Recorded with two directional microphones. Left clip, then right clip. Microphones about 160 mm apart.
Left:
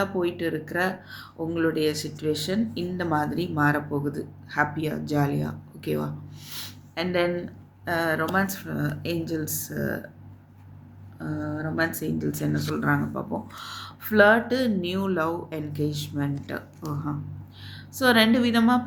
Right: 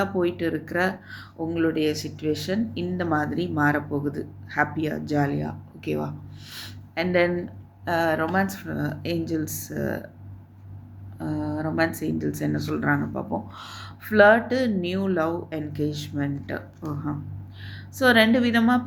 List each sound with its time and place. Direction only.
0.0 s speech: 5° right (ahead or behind)
11.2 s speech: 15° right (ahead or behind)
11.9 s speech: 5° right (ahead or behind)